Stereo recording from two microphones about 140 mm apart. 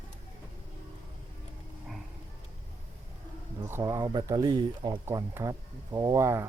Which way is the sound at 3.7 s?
20° right (ahead or behind).